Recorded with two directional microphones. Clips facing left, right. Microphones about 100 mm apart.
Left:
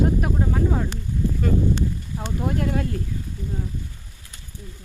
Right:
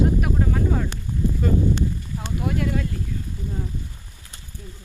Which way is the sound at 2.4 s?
35° left (ahead or behind).